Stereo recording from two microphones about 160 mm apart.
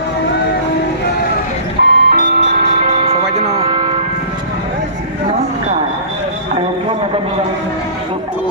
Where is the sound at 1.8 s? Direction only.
90° right.